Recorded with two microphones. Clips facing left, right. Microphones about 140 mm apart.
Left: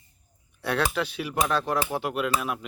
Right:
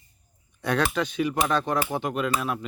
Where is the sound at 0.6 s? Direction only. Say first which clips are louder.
Right 2 dB; 5° left (ahead or behind).